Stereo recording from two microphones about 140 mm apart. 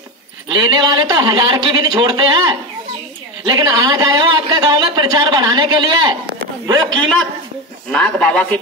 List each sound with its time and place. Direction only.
0.5 s a man's voice: 30° right (ahead or behind)
7.9 s a man's voice: 10° left (ahead or behind)